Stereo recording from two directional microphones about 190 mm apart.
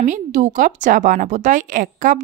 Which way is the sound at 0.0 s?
40° right (ahead or behind).